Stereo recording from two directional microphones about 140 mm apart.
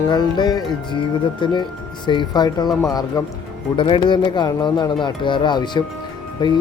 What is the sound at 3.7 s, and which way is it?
Speech, 35° left (ahead or behind).